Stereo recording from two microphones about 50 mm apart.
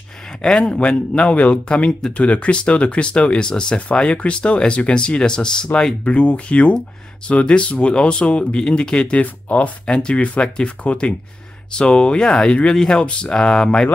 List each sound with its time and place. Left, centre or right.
0.4 s speech: centre
1.9 s speech: centre
2.1 s speech: left
6.0 s speech: left